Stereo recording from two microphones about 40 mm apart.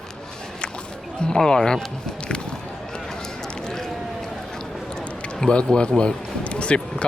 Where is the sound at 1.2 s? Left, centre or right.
Centre.